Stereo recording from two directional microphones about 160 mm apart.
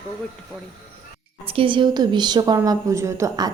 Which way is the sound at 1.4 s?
35° right (ahead or behind).